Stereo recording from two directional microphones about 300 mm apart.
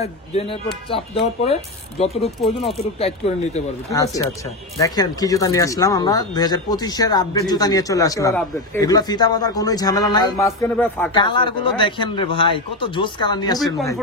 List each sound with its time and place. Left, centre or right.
0.0 s speech: centre
3.9 s speech: centre